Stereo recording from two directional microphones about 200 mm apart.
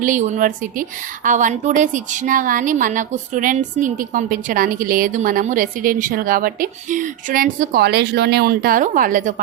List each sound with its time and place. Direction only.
0.0 s a woman's voice: 40° right (ahead or behind)